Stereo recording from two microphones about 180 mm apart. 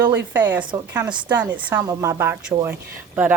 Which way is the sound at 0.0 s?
15° right (ahead or behind).